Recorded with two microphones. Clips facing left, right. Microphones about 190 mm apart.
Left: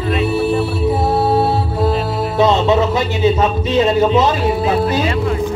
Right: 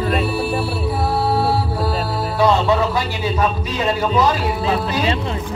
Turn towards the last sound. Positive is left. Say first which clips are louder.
# left 6 dB
turn(degrees=25)  # may be behind; listen again after turning